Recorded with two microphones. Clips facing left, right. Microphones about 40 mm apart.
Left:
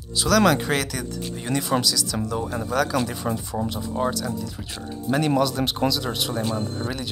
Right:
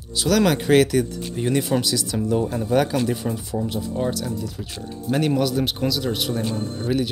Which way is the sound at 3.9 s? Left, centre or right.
Centre.